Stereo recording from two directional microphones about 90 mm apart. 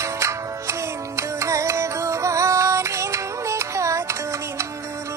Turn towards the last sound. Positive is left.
turn(degrees=-35)  # may be behind; listen again after turning